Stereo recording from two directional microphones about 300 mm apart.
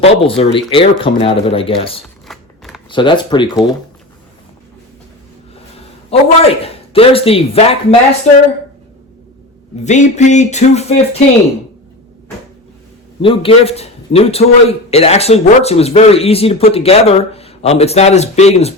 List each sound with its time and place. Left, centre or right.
0.0 s speech: centre
2.2 s shuffling cards: centre
2.9 s speech: centre
6.1 s a man's voice: centre
9.8 s a man's voice: left
13.2 s a man's voice: centre